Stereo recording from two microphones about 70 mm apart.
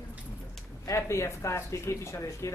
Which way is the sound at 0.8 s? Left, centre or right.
Left.